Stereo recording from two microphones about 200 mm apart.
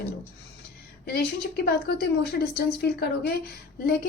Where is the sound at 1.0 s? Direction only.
50° left (ahead or behind).